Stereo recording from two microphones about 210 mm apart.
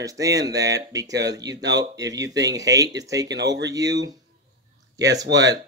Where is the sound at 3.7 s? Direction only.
15° right (ahead or behind).